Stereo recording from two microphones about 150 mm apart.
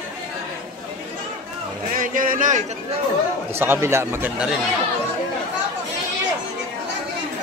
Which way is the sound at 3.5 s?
15° right (ahead or behind).